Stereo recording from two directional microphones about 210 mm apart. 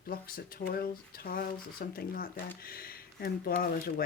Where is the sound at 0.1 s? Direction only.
45° left (ahead or behind).